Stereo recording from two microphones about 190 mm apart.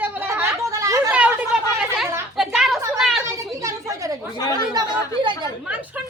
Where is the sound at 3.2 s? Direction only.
15° right (ahead or behind).